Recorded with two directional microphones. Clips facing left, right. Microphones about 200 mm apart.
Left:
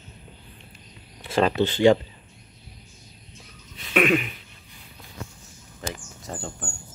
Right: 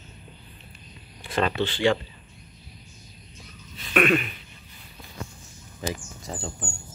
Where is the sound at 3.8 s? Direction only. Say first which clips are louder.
Left 1 dB; 10° left (ahead or behind).